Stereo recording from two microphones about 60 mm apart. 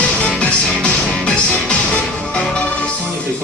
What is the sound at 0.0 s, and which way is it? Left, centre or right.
Music, centre.